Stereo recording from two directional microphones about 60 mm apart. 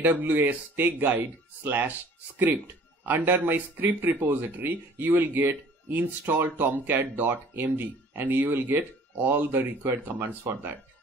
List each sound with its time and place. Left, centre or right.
0.0 s speech: right